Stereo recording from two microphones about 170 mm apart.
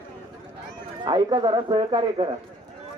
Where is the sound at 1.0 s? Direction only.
25° right (ahead or behind).